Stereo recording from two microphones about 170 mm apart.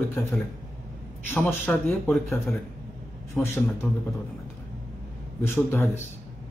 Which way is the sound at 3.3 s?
15° left (ahead or behind).